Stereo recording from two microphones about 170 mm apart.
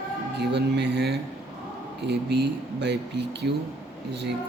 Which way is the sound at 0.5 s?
80° right.